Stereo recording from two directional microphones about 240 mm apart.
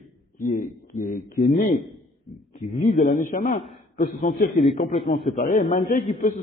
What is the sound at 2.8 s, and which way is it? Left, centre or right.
A man's voice, left.